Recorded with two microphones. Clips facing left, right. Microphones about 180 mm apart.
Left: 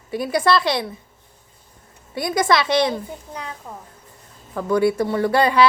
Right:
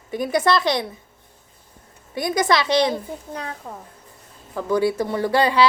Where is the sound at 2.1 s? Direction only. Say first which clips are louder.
Left 1 dB; 20° right (ahead or behind).